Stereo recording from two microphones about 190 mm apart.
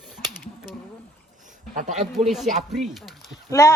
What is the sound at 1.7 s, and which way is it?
Speech, 40° right (ahead or behind).